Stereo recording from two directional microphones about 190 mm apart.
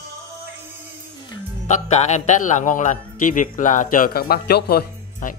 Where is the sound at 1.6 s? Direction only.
35° left (ahead or behind); by 5.3 s 55° left (ahead or behind).